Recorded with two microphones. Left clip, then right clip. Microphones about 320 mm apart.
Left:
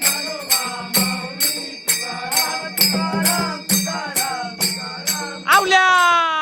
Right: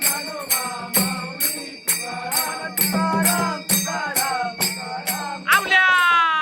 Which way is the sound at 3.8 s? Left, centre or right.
Right.